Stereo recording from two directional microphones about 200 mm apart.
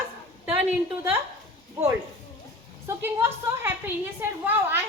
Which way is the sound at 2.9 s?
10° right (ahead or behind).